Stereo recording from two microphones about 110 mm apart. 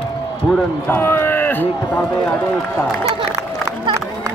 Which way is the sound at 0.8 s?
20° left (ahead or behind).